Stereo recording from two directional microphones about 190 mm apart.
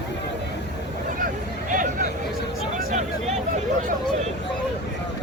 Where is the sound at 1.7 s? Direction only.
45° right (ahead or behind).